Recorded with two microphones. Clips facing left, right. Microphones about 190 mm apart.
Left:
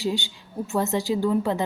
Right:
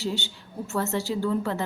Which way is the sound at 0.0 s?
15° left (ahead or behind).